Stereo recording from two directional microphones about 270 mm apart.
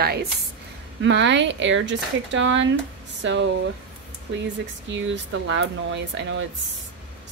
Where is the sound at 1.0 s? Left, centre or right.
Right.